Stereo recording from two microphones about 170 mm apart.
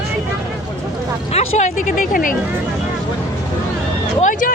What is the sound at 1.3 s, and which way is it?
Speech, 40° left (ahead or behind).